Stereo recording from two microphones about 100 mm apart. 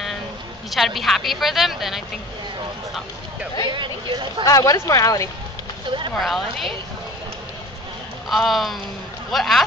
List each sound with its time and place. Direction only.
0.7 s a woman's voice: centre (ahead or behind)
3.7 s speech: 50° right (ahead or behind)
4.5 s speech: 35° left (ahead or behind)
6.1 s a woman's voice: centre (ahead or behind)
8.3 s a woman's voice: centre (ahead or behind)